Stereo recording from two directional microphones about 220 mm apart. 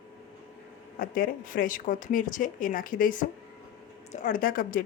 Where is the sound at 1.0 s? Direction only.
40° left (ahead or behind).